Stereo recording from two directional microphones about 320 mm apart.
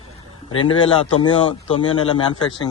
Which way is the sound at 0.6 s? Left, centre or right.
Centre.